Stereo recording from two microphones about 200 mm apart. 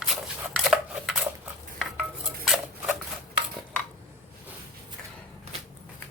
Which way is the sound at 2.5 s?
Centre (ahead or behind).